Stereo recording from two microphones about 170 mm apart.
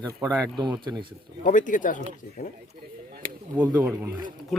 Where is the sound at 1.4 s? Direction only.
50° left (ahead or behind).